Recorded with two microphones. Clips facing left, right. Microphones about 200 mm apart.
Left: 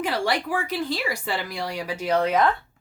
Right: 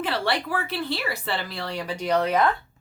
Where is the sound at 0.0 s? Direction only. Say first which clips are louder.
Left 1 dB; 15° left (ahead or behind).